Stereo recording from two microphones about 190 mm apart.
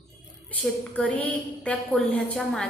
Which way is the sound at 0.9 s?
5° left (ahead or behind).